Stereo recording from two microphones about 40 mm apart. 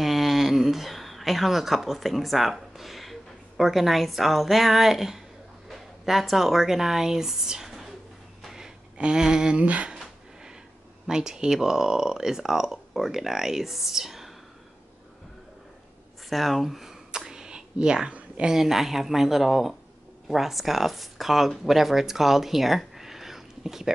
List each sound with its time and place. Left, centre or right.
0.0 s speech: centre
8.9 s speech: right
9.6 s speech: right
11.1 s speech: centre
16.3 s a sound: centre; by 18.1 s right
18.4 s speech: centre